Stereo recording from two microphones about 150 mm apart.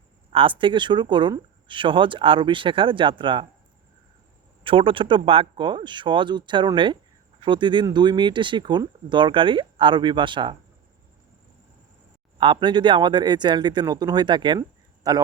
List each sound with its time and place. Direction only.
0.3 s speech: 35° right (ahead or behind)
4.6 s speech: 35° right (ahead or behind)
12.4 s speech: 30° right (ahead or behind)